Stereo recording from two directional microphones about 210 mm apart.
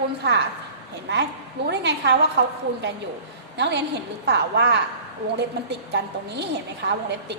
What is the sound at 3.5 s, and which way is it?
A woman's voice, 55° right (ahead or behind).